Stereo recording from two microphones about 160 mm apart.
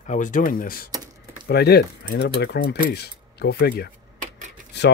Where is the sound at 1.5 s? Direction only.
90° left.